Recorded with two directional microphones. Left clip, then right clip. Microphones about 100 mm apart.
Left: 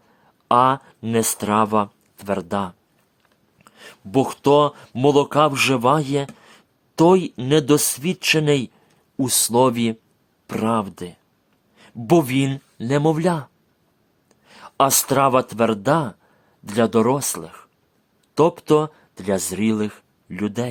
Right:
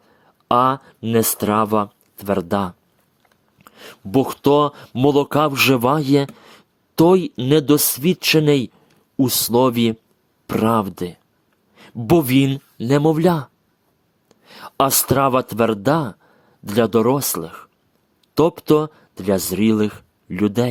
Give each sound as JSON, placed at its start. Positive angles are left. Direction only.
{"t": 0.0, "sound": "a sound", "side_deg": -35}
{"t": 1.1, "sound": "speech", "side_deg": -30}
{"t": 9.1, "sound": "speech", "side_deg": -30}